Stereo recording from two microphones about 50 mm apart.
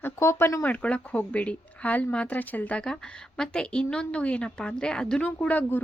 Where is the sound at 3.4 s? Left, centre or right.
Centre.